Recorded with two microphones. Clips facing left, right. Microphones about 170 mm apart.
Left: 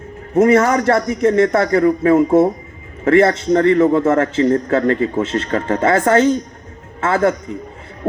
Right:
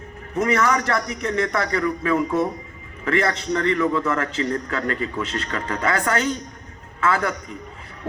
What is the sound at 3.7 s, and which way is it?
Speech, 45° left (ahead or behind).